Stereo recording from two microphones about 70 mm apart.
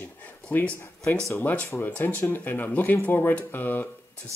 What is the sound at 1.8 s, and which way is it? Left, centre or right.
Speech, left.